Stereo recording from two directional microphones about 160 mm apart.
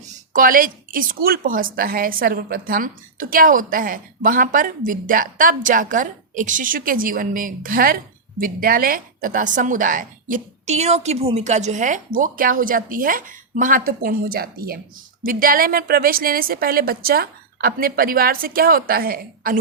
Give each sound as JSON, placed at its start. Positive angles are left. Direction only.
{"t": 0.0, "sound": "speech", "side_deg": -55}